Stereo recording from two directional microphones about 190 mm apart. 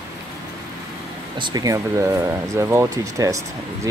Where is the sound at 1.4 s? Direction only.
20° right (ahead or behind).